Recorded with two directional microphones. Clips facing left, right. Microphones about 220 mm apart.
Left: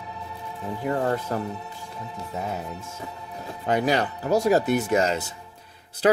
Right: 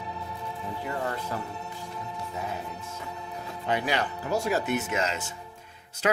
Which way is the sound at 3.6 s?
40° left (ahead or behind).